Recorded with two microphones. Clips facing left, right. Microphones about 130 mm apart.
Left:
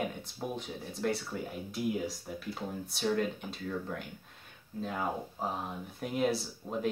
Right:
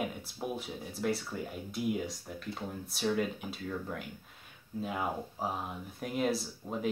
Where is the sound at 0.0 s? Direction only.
5° right (ahead or behind).